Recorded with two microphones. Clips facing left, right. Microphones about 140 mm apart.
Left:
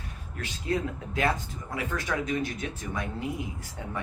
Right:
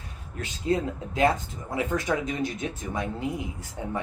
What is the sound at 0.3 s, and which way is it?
Speech, 25° right (ahead or behind).